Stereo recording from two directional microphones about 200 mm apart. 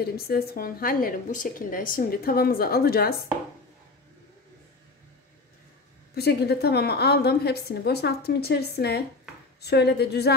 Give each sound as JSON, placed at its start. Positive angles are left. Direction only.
{"t": 0.0, "sound": "a woman's voice", "side_deg": 50}
{"t": 6.1, "sound": "a woman's voice", "side_deg": 55}